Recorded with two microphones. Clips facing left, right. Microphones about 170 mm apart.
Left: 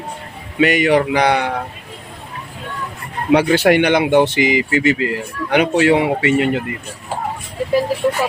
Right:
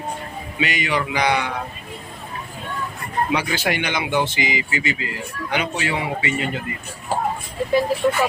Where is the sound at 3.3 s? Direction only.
65° left (ahead or behind).